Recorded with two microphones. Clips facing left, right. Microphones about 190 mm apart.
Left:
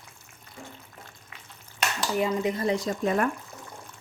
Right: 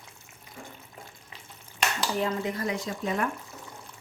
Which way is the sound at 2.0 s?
10° left (ahead or behind).